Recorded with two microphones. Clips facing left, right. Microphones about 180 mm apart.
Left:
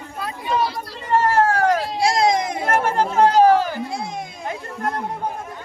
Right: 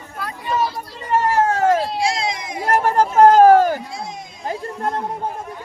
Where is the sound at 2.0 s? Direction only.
40° left (ahead or behind).